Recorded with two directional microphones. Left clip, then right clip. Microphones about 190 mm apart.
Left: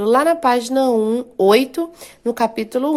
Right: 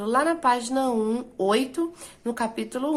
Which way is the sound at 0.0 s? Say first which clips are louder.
Left 8 dB; 35° left (ahead or behind).